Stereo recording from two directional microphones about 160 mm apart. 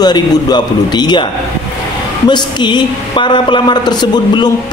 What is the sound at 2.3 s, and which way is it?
Speech, 30° left (ahead or behind).